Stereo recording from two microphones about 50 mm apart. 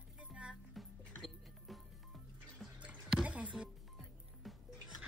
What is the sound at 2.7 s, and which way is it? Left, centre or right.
Music, right.